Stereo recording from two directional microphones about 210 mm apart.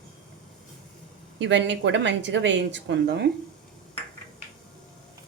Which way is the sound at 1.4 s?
55° right (ahead or behind).